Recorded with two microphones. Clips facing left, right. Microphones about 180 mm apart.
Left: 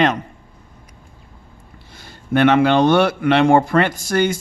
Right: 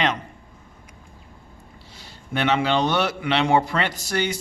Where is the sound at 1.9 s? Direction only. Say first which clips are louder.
Left 10 dB; 50° left (ahead or behind).